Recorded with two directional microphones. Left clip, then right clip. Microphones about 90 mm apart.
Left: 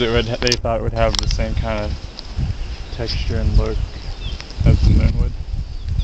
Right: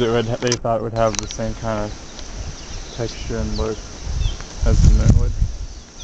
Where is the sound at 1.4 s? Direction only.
55° left (ahead or behind).